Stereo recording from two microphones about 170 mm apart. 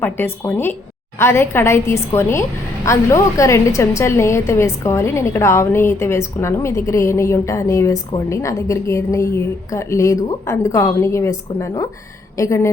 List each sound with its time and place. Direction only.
0.0 s a woman's voice: 15° left (ahead or behind)